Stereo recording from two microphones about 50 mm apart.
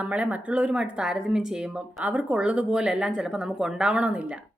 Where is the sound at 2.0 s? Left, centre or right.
Right.